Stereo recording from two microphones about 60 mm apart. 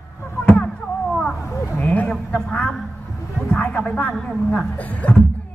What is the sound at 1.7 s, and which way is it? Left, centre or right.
A man's voice, left.